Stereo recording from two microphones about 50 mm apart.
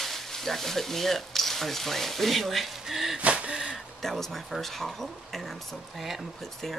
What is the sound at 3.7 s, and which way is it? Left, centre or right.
Speech, centre.